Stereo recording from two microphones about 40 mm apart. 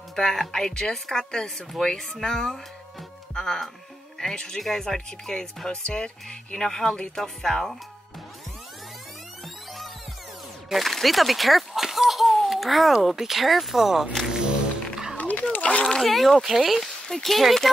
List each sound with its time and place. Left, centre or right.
0.1 s speech: centre
2.0 s speech: centre
2.2 s speech: centre
5.8 s speech: left
10.7 s a sound: centre
13.0 s speech: centre
15.1 s a sound: left
15.5 s a sound: left
16.0 s speech: centre